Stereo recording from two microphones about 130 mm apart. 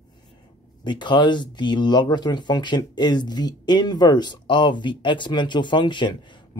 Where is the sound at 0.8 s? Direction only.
35° left (ahead or behind).